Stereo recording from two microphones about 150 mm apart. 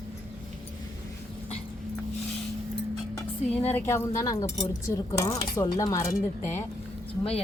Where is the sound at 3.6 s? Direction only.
15° left (ahead or behind).